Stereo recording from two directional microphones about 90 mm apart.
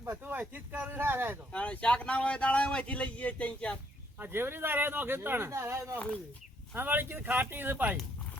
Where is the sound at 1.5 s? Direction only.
15° left (ahead or behind).